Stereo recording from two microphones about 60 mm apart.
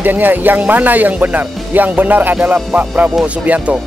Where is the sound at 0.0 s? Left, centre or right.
Right.